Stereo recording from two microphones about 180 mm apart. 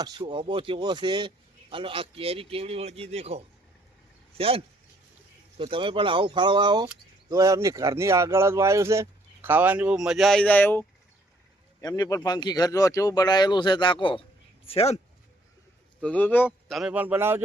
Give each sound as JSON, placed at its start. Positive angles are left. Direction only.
{"t": 0.0, "sound": "a man's voice", "side_deg": -25}
{"t": 11.8, "sound": "speech", "side_deg": 20}
{"t": 16.0, "sound": "speech", "side_deg": 5}
{"t": 16.5, "sound": "speech", "side_deg": 0}